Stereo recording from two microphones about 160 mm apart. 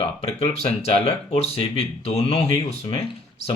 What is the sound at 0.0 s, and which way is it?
Speech, 40° left (ahead or behind).